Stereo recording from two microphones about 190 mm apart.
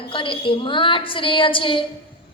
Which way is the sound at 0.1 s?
25° left (ahead or behind).